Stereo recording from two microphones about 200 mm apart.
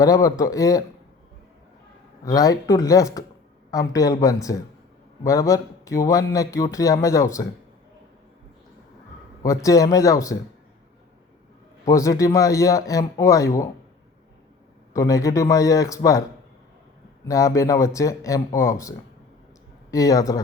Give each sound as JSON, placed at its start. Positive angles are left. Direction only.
{"t": 0.0, "sound": "speech", "side_deg": 15}
{"t": 2.2, "sound": "speech", "side_deg": 20}
{"t": 9.4, "sound": "speech", "side_deg": 15}
{"t": 11.9, "sound": "speech", "side_deg": 15}
{"t": 14.9, "sound": "speech", "side_deg": 15}
{"t": 17.2, "sound": "speech", "side_deg": 15}